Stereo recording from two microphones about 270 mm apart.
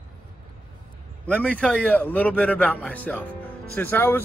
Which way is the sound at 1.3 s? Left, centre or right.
Centre.